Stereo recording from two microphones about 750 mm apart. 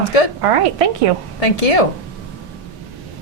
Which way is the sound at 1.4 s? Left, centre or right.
Left.